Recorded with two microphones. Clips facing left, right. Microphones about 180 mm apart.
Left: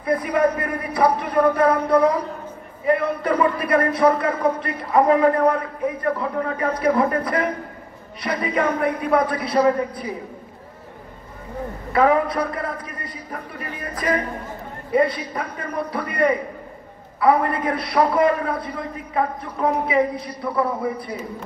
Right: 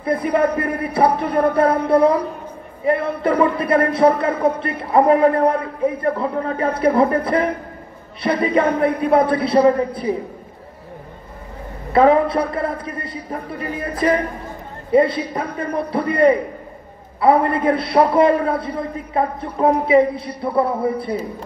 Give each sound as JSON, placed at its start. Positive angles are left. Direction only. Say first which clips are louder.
{"t": 0.0, "sound": "speech", "louder": "right 2 dB", "side_deg": -30}
{"t": 11.9, "sound": "speech", "louder": "right 4 dB", "side_deg": -25}